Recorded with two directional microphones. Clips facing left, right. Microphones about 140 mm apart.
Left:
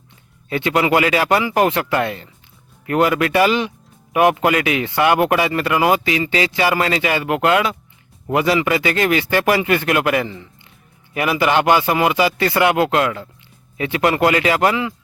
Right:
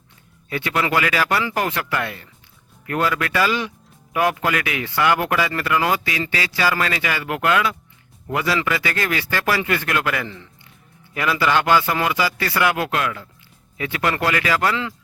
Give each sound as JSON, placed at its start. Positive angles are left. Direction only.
{"t": 0.5, "sound": "a man's voice", "side_deg": 20}